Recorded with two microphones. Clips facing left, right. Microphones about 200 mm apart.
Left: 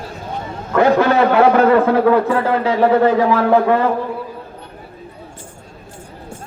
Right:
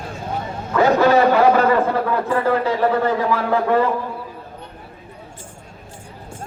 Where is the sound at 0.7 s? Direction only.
60° left (ahead or behind).